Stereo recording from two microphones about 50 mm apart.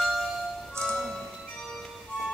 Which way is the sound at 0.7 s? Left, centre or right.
Centre.